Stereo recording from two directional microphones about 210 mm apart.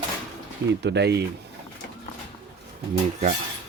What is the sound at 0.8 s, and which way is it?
Speech, 55° right (ahead or behind).